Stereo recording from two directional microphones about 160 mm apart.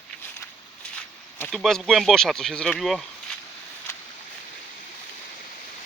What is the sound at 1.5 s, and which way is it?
Speech, centre (ahead or behind).